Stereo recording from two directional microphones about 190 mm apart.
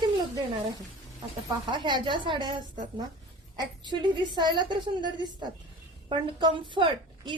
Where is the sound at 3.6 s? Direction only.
25° right (ahead or behind).